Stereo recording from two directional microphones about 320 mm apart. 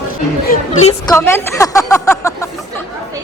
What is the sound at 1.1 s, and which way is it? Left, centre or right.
A woman's voice, centre.